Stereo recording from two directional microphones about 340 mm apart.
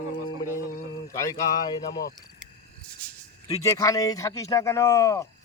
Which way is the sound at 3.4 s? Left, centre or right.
Centre.